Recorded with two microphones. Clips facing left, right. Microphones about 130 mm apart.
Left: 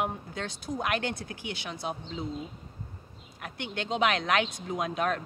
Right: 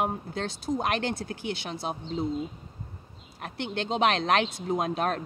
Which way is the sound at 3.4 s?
30° right (ahead or behind).